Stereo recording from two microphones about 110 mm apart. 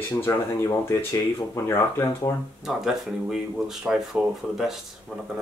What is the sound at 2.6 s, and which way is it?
Speech, 5° right (ahead or behind).